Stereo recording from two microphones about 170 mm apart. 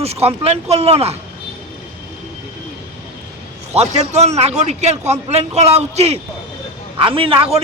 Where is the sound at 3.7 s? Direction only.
40° right (ahead or behind).